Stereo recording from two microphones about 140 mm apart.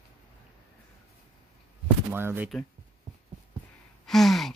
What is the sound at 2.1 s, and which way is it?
Speech, 15° right (ahead or behind).